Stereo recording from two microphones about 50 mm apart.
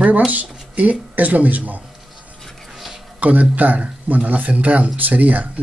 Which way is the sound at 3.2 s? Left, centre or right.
Right.